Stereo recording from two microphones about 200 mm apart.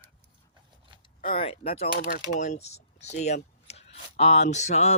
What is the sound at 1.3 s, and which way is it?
Speech, 30° left (ahead or behind).